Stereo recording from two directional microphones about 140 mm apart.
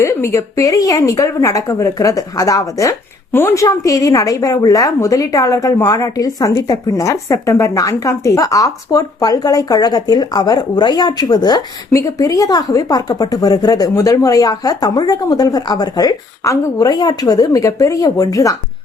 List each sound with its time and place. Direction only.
0.0 s a woman's voice: 20° left (ahead or behind)